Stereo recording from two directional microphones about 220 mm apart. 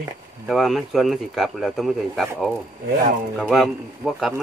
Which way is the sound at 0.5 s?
Centre (ahead or behind).